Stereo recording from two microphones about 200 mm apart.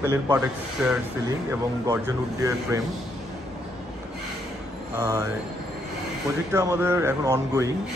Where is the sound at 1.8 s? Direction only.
15° right (ahead or behind).